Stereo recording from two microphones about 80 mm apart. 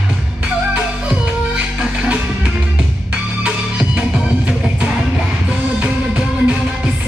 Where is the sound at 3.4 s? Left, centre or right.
Centre.